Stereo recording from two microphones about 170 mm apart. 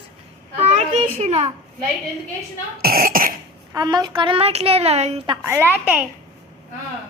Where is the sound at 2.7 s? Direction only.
60° right (ahead or behind).